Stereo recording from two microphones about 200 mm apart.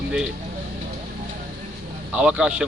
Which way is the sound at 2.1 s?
5° right (ahead or behind).